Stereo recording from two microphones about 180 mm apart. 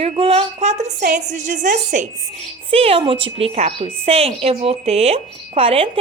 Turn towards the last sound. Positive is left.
turn(degrees=-30)  # may be behind; listen again after turning